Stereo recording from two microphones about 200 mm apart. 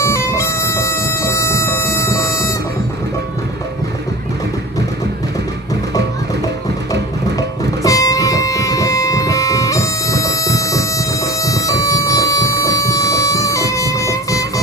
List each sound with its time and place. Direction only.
0.0 s bagpipes: 15° left (ahead or behind)
7.8 s music: 15° left (ahead or behind)